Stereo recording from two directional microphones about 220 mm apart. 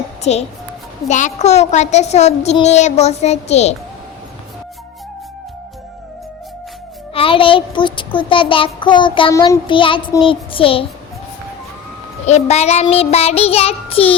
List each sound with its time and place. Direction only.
0.2 s a child's voice: 30° left (ahead or behind)
7.1 s a child's voice: 25° left (ahead or behind)
12.2 s a child's voice: 30° left (ahead or behind)